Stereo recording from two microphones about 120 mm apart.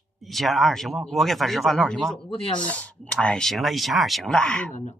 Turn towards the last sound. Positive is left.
turn(degrees=5)  # may be behind; listen again after turning